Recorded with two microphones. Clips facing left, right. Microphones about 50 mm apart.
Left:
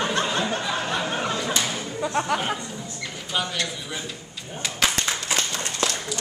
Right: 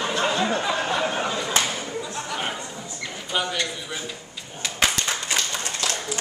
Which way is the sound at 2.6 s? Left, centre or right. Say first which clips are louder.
Even; centre.